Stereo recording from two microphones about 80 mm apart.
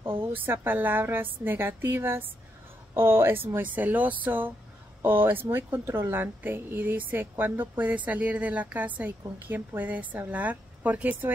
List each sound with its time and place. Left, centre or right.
0.2 s a woman's voice: right